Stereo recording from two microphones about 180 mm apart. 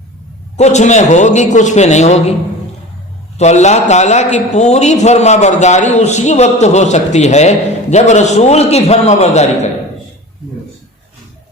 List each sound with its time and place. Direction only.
0.5 s a man's voice: 40° left (ahead or behind)
3.3 s a man's voice: 40° left (ahead or behind)